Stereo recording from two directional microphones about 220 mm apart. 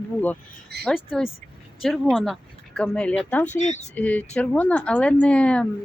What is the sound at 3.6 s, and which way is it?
Speech, 30° left (ahead or behind).